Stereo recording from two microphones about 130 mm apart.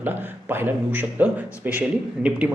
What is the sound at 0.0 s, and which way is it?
A man's voice, 15° right (ahead or behind).